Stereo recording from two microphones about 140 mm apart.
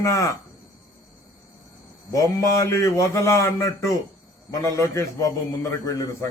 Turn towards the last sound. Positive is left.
turn(degrees=20)  # may be behind; listen again after turning